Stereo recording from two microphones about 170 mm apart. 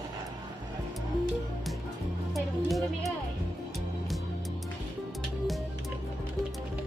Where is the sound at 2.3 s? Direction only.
Centre (ahead or behind).